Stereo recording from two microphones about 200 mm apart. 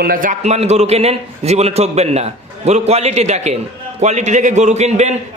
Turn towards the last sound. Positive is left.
turn(degrees=-35)  # may be behind; listen again after turning